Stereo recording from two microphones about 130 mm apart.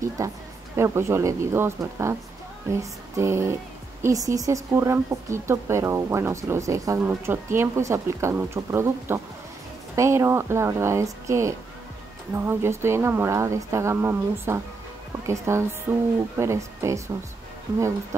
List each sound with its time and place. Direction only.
0.2 s a woman's voice: 25° right (ahead or behind)